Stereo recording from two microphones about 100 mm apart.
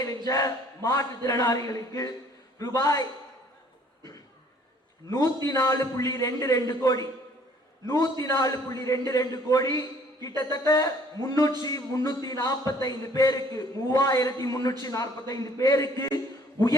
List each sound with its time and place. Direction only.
0.3 s a man's voice: 35° left (ahead or behind)
5.1 s a man's voice: 35° left (ahead or behind)